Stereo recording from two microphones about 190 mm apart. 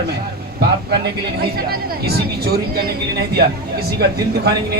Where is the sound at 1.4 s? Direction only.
55° right (ahead or behind).